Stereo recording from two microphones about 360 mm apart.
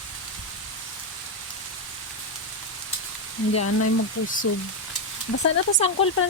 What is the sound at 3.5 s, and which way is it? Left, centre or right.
Speech, left.